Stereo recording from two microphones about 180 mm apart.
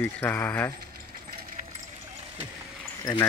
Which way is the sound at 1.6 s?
45° right (ahead or behind).